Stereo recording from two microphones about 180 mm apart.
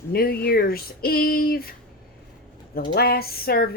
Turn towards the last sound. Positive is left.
turn(degrees=60)  # may be behind; listen again after turning